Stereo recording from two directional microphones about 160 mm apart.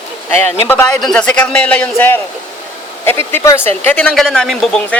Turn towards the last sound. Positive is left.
turn(degrees=5)  # may be behind; listen again after turning